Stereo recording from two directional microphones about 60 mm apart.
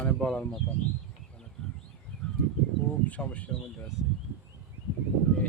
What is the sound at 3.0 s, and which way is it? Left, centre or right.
Speech, left.